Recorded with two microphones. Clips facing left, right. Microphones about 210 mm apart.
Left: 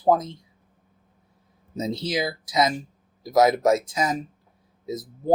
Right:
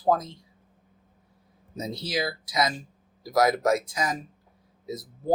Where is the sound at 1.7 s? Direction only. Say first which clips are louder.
Left 4 dB; 25° left (ahead or behind).